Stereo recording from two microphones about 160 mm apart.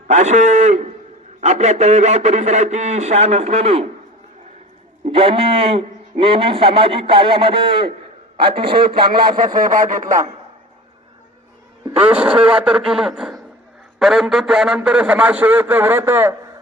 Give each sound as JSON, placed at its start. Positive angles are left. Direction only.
{"t": 0.1, "sound": "a man's voice", "side_deg": -50}
{"t": 5.0, "sound": "a man's voice", "side_deg": -35}
{"t": 9.6, "sound": "speech", "side_deg": -55}
{"t": 12.0, "sound": "a man's voice", "side_deg": -10}